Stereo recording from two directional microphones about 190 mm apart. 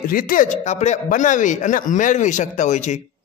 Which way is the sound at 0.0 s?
50° left (ahead or behind).